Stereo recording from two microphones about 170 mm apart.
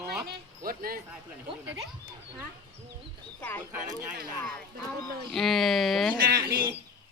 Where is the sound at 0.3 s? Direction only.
55° right (ahead or behind).